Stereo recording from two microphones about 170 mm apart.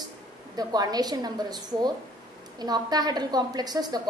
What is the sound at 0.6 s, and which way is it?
A woman's voice, 25° right (ahead or behind).